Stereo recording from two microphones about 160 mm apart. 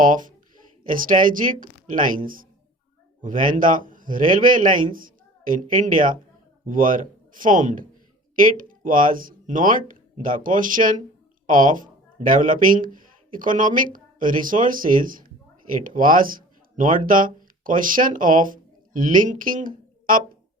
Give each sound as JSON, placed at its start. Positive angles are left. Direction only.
{"t": 0.0, "sound": "speech", "side_deg": -55}